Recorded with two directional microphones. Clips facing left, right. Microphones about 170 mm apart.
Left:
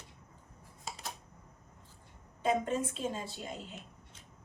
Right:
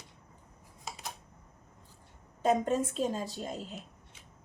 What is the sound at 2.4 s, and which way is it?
A woman's voice, 40° right (ahead or behind).